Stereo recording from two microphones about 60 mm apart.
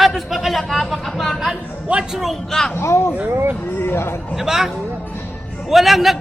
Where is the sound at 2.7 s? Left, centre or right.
Left.